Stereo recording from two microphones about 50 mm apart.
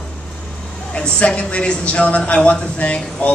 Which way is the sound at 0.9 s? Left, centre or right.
Centre.